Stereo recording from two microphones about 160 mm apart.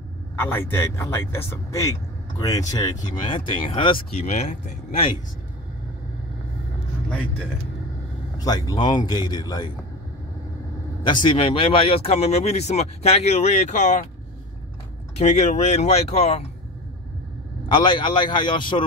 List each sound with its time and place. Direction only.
0.4 s speech: 15° left (ahead or behind); by 5.0 s 45° left (ahead or behind)
8.4 s a man's voice: 25° left (ahead or behind)
11.1 s speech: 30° left (ahead or behind); by 14.0 s 50° left (ahead or behind)
15.1 s speech: 45° left (ahead or behind)
17.6 s speech: 30° left (ahead or behind)